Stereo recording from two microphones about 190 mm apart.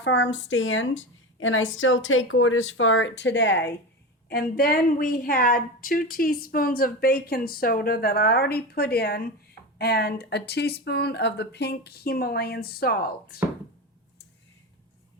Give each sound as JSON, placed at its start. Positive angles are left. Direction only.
{"t": 0.0, "sound": "a woman's voice", "side_deg": 70}
{"t": 4.3, "sound": "a woman's voice", "side_deg": 55}